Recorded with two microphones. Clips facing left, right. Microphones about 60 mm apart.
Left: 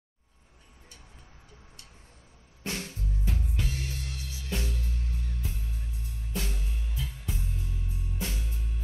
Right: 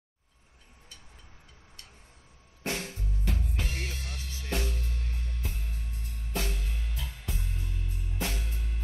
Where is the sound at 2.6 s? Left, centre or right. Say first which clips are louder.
Right 2 dB; right.